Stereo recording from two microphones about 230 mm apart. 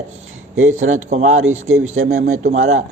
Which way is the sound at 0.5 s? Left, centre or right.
Right.